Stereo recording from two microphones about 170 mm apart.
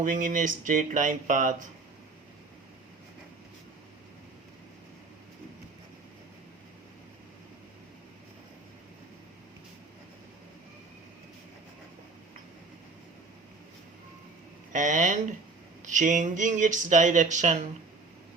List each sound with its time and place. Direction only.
0.0 s speech: 50° right (ahead or behind)
14.7 s speech: 50° right (ahead or behind)